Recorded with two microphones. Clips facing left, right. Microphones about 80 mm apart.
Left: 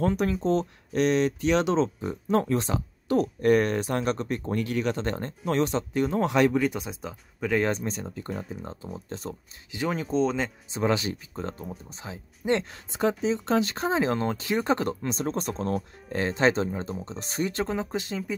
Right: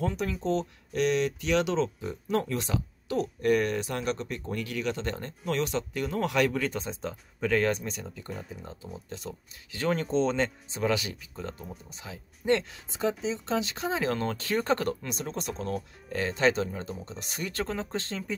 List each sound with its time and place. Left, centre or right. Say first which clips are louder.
0.0 s speech: left 5 dB; left; by 7.6 s centre
7.6 s speech: left 1 dB; left
9.7 s speech: even; centre
10.7 s speech: left 3 dB; left
12.4 s speech: even; centre
13.2 s speech: left 5 dB; left
13.8 s speech: left 4 dB; left; by 18.3 s centre